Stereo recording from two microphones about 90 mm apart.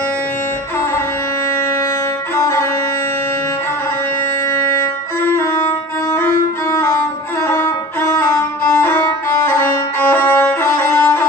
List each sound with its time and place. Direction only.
2.3 s music: 30° left (ahead or behind)
4.4 s music: 30° left (ahead or behind)